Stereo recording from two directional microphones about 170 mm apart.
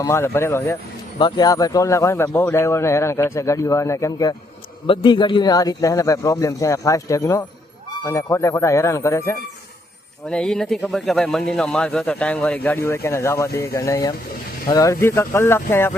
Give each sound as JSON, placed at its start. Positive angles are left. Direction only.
{"t": 0.0, "sound": "speech", "side_deg": 15}
{"t": 10.2, "sound": "speech", "side_deg": 5}